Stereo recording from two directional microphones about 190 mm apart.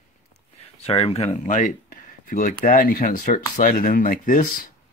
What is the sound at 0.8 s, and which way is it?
Speech, 30° left (ahead or behind).